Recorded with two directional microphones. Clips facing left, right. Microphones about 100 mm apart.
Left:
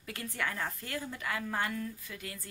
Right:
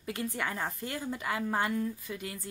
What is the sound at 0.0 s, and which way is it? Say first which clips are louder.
A woman's voice: right 3 dB; 20° right (ahead or behind).